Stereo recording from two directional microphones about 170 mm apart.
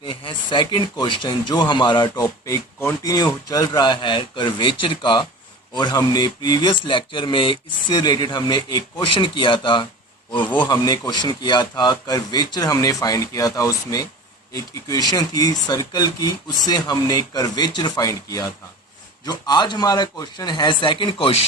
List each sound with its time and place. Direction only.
0.0 s speech: 30° left (ahead or behind)
10.4 s a man's voice: 10° left (ahead or behind)
10.7 s speech: 20° left (ahead or behind)